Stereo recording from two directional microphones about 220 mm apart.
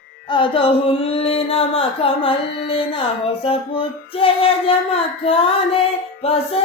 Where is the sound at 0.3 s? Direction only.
20° left (ahead or behind).